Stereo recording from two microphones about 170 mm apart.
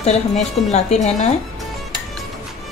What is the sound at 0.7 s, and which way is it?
Speech, 40° left (ahead or behind).